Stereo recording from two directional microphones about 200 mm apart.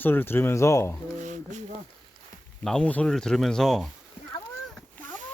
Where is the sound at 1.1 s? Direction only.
35° right (ahead or behind).